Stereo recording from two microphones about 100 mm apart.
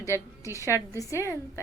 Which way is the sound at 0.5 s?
30° left (ahead or behind).